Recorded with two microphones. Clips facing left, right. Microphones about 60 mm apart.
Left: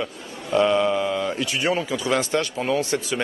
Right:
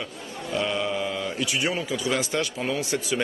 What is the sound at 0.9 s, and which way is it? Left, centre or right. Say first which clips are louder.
Speech: left 5 dB; centre.